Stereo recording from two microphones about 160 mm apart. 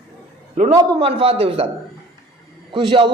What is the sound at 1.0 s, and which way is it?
Speech, 40° right (ahead or behind).